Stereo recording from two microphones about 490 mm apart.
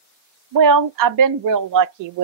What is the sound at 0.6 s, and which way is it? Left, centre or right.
A woman's voice, right.